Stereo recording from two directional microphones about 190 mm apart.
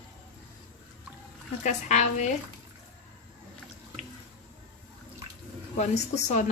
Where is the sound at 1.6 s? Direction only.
40° left (ahead or behind).